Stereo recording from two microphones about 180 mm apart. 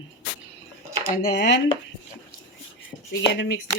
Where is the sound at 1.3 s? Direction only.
80° left.